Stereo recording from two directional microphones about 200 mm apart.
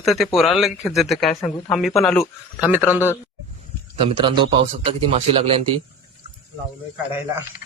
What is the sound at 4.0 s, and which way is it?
A man's voice, 25° right (ahead or behind).